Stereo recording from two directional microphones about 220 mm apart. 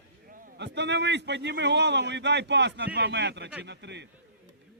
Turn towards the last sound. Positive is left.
turn(degrees=-50)  # may be behind; listen again after turning